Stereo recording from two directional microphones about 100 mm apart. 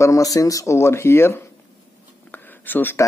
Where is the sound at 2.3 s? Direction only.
20° left (ahead or behind).